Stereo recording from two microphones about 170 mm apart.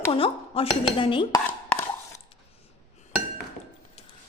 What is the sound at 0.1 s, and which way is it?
A woman's voice, 35° left (ahead or behind).